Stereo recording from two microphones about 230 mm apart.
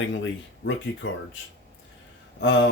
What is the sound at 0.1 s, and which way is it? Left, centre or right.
Speech, left.